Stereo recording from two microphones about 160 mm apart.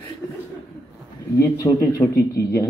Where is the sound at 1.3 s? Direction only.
20° left (ahead or behind).